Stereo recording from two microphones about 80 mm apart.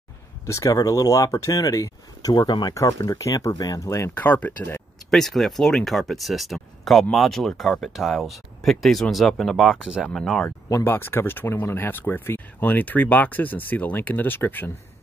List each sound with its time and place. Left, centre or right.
0.5 s speech: left
2.3 s speech: left
2.7 s speech: left
4.1 s speech: left
5.1 s speech: centre
10.0 s speech: centre
10.8 s speech: left